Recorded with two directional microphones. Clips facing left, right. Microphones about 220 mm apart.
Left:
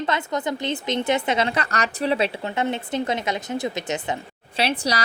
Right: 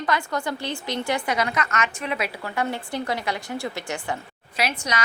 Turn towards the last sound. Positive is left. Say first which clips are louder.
# left 3 dB
turn(degrees=30)  # may be behind; listen again after turning